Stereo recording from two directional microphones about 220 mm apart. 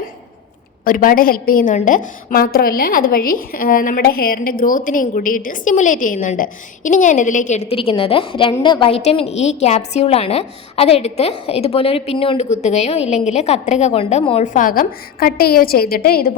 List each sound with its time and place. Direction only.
0.9 s a woman's voice: 40° left (ahead or behind)